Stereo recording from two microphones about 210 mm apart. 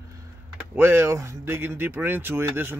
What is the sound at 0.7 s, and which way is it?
Speech, 10° right (ahead or behind).